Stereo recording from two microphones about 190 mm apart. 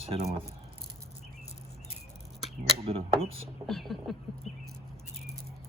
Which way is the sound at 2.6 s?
30° right (ahead or behind).